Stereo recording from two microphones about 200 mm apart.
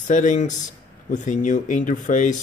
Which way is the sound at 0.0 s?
40° left (ahead or behind).